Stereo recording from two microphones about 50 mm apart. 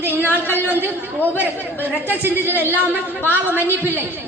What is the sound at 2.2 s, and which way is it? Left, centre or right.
Speech, right.